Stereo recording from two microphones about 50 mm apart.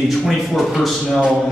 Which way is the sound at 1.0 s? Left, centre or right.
Centre.